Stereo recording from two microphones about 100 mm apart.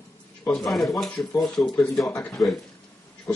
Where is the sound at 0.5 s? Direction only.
Centre (ahead or behind).